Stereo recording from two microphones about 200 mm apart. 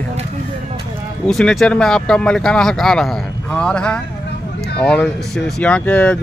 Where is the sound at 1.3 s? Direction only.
Centre (ahead or behind).